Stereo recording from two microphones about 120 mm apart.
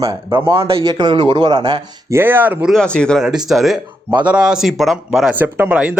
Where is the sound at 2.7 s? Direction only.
5° left (ahead or behind).